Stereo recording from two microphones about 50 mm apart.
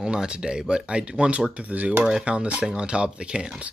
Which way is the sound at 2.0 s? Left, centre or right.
Centre.